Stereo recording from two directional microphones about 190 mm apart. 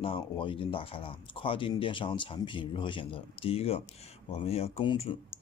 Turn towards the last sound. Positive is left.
turn(degrees=30)  # may be behind; listen again after turning